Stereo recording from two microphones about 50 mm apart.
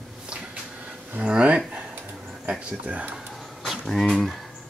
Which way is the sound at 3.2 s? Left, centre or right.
Centre.